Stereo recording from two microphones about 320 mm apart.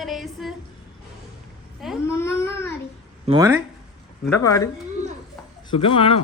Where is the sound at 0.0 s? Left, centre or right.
Centre.